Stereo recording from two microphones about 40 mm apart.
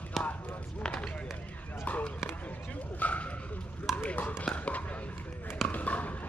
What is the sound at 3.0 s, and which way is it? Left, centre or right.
Bow-wow, left.